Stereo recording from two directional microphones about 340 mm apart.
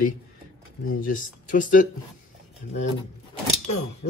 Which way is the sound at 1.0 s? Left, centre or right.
Left.